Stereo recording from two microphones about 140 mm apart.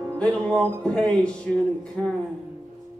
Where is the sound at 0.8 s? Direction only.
5° left (ahead or behind).